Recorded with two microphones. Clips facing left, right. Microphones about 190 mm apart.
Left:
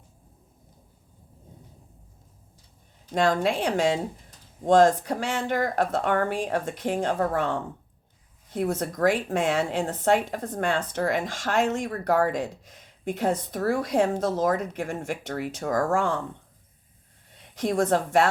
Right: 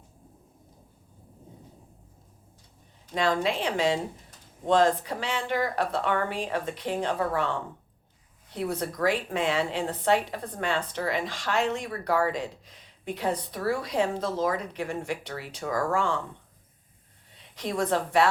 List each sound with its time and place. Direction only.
3.2 s speech: 45° left (ahead or behind)
17.3 s a woman's voice: 45° left (ahead or behind)